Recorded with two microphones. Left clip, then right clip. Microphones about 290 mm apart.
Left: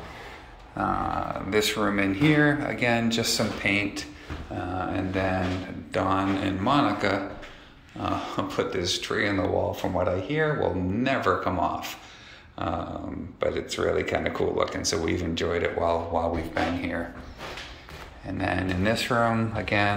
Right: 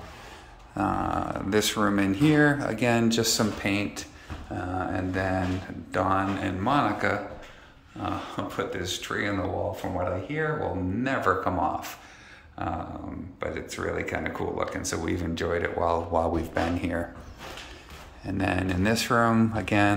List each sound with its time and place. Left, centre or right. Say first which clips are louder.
0.7 s speech: even; right
12.5 s dog: left 2 dB; centre
13.4 s speech: left 6 dB; centre
18.2 s speech: even; right